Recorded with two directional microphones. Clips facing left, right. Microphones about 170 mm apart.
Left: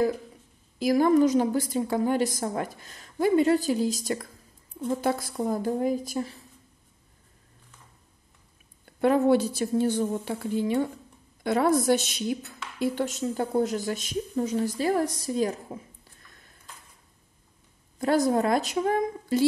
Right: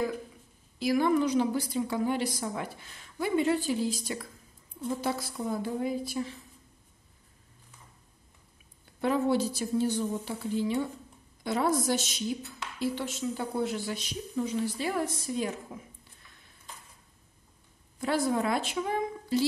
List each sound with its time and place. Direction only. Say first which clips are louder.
0.7 s a woman's voice: left 5 dB; 45° left (ahead or behind)
8.8 s a woman's voice: left 6 dB; 55° left (ahead or behind); by 15.8 s 35° left (ahead or behind)
18.0 s speech: left 5 dB; 40° left (ahead or behind)